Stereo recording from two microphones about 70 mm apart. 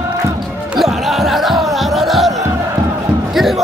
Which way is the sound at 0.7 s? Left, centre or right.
Centre.